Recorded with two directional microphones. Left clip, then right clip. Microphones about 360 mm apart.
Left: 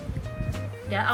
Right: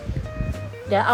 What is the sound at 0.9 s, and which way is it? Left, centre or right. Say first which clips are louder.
Music: right 7 dB; centre.